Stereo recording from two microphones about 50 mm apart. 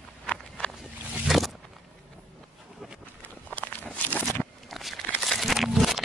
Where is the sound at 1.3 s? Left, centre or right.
Centre.